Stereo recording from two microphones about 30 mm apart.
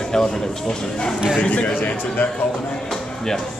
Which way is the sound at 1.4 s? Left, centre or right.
Left.